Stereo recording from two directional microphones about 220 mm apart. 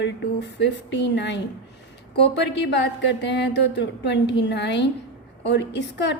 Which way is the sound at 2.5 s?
50° left (ahead or behind).